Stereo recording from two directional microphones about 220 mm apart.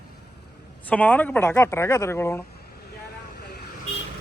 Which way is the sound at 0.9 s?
5° left (ahead or behind).